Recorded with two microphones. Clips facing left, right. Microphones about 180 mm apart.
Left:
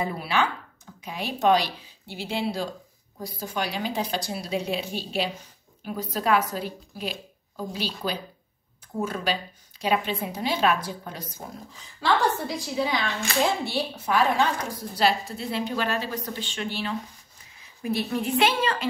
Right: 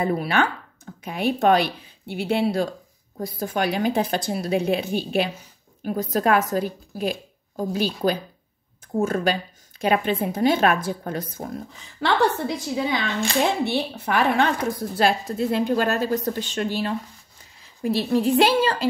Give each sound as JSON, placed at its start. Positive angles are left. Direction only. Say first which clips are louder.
{"t": 0.0, "sound": "a woman's voice", "louder": "right 4 dB", "side_deg": -55}